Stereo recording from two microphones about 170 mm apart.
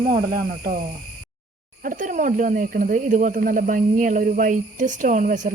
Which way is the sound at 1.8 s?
50° right (ahead or behind).